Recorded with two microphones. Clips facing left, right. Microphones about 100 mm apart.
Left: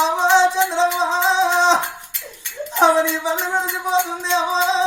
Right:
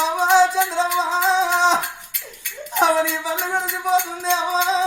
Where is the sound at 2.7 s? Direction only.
25° left (ahead or behind).